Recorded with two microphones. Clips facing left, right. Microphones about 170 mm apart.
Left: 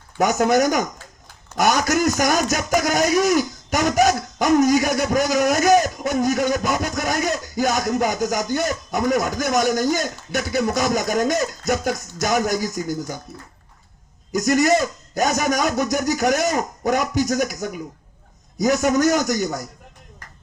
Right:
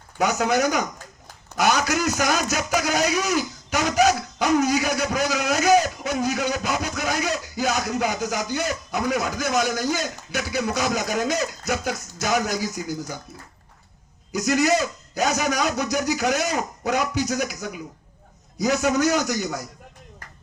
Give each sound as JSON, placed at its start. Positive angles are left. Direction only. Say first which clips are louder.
{"t": 0.2, "sound": "a man's voice", "louder": "left 4 dB", "side_deg": 50}
{"t": 14.3, "sound": "a man's voice", "louder": "left 3 dB", "side_deg": 50}